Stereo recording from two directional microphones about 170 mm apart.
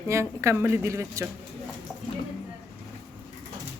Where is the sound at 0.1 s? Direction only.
15° right (ahead or behind).